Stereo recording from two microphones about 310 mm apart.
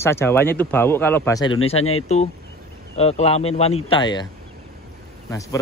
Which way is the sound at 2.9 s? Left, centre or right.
Centre.